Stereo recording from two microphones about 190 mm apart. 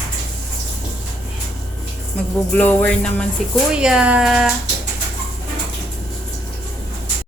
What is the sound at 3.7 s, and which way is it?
Speech, 5° right (ahead or behind).